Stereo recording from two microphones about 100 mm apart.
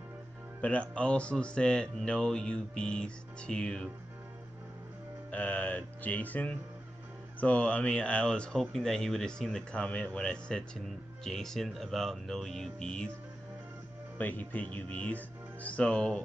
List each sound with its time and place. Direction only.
0.6 s speech: 15° left (ahead or behind)
5.3 s speech: 15° left (ahead or behind)
14.1 s speech: 15° left (ahead or behind)